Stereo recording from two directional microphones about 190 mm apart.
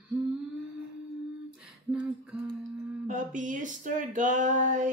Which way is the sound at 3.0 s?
40° right (ahead or behind).